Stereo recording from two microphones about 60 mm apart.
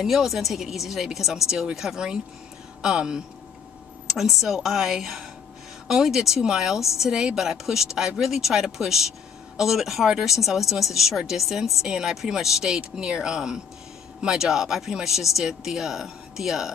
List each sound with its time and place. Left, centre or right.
0.0 s a woman's voice: centre